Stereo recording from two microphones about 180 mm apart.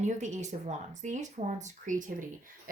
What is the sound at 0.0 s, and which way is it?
Speech, 40° right (ahead or behind).